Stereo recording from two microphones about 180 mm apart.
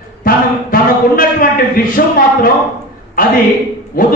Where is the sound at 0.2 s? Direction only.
50° left (ahead or behind).